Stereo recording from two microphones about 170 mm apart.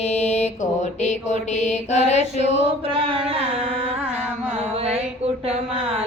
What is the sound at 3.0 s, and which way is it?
Mantra, 35° right (ahead or behind).